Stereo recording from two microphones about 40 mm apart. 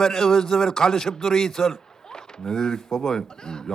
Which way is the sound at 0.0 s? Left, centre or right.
Centre.